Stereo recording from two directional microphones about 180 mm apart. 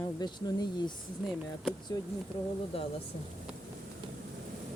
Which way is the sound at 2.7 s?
30° left (ahead or behind).